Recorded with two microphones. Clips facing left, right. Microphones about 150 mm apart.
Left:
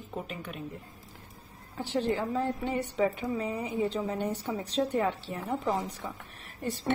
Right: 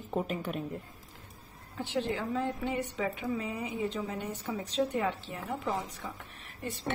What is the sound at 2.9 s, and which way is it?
A woman's voice, 35° left (ahead or behind).